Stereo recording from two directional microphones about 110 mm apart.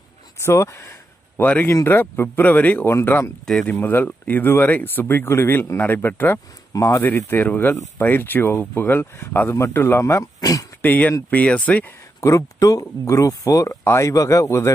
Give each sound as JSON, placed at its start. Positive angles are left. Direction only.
{"t": 0.4, "sound": "speech", "side_deg": 25}
{"t": 3.4, "sound": "speech", "side_deg": 5}
{"t": 3.7, "sound": "speech", "side_deg": 20}
{"t": 10.8, "sound": "speech", "side_deg": 15}
{"t": 12.2, "sound": "speech", "side_deg": 30}